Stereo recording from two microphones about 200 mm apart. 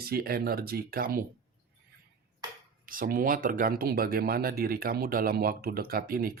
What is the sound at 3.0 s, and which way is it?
Speech, 45° right (ahead or behind).